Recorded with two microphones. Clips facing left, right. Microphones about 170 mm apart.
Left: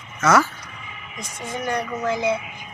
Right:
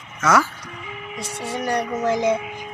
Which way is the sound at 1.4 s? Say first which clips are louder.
Right 2 dB; 35° right (ahead or behind).